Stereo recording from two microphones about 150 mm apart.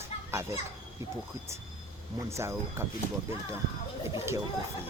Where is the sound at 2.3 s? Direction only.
20° right (ahead or behind).